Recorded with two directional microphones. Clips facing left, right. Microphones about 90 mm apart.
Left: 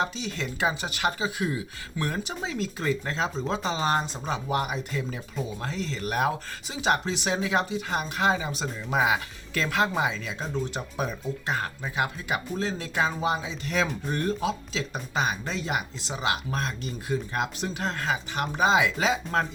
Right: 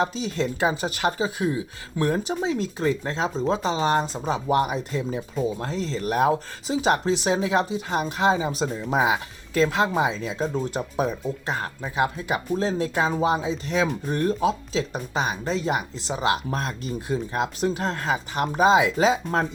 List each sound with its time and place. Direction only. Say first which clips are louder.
0.0 s speech: right 5 dB; 35° right (ahead or behind)